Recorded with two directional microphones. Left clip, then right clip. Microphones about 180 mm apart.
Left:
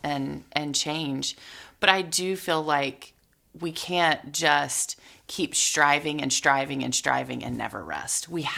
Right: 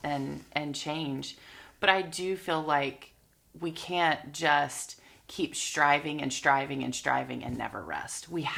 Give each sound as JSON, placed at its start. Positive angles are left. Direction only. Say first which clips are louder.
{"t": 0.0, "sound": "speech", "louder": "left 4 dB", "side_deg": 25}